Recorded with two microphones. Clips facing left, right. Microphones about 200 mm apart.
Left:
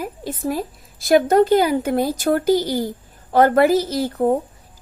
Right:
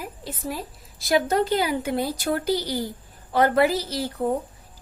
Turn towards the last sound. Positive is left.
turn(degrees=45)  # may be behind; listen again after turning